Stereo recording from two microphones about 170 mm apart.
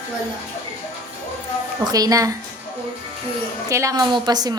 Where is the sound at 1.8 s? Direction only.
20° right (ahead or behind).